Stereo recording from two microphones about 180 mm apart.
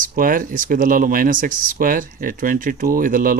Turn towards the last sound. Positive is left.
turn(degrees=-50)  # may be behind; listen again after turning